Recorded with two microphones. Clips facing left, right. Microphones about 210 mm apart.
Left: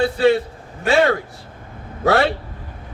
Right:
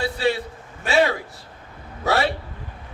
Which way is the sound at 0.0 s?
55° left (ahead or behind).